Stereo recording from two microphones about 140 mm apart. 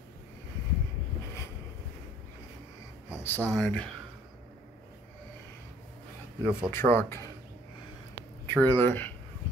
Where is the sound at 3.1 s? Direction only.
15° left (ahead or behind).